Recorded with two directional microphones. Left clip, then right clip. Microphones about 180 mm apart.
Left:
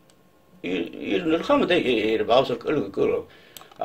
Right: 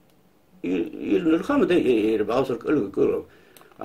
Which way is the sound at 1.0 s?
60° right (ahead or behind).